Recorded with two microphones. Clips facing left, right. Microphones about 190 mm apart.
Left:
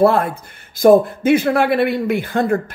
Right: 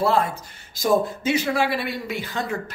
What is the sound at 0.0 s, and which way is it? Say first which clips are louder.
Speech: left 7 dB; 55° left (ahead or behind).